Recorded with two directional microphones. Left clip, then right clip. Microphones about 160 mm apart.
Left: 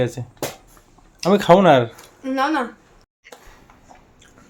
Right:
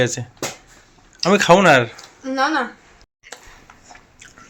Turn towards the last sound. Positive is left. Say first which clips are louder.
# right 4 dB
turn(degrees=0)  # may be behind; listen again after turning